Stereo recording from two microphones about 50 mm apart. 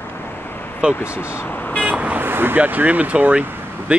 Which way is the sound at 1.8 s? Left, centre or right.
Right.